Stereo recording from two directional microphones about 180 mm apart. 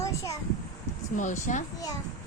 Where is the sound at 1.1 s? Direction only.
45° left (ahead or behind).